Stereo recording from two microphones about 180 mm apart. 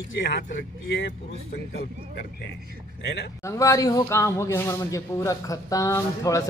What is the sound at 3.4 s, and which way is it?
A man's voice, 15° left (ahead or behind).